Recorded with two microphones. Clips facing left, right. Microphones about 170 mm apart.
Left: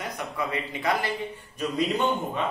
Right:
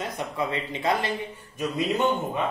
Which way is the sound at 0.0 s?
25° right (ahead or behind).